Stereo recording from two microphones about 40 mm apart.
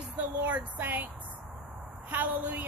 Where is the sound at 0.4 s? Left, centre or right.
Right.